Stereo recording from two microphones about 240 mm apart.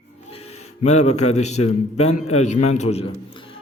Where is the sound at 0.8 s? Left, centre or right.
Left.